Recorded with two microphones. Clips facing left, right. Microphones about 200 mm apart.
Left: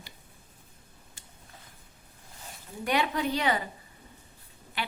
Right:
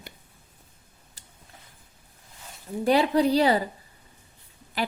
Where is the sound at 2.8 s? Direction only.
35° right (ahead or behind).